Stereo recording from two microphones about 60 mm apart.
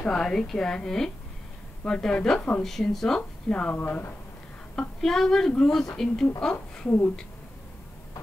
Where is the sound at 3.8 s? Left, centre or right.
Left.